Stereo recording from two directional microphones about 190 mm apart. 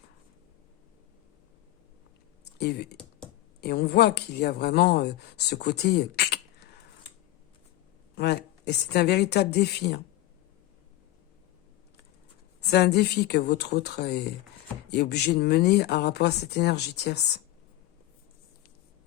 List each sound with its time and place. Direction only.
2.4 s a sound: 60° left (ahead or behind)
3.6 s speech: 55° left (ahead or behind)
8.1 s speech: 60° left (ahead or behind)
12.6 s speech: 60° left (ahead or behind)